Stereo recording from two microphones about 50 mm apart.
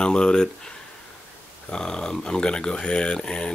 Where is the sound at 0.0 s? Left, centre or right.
Centre.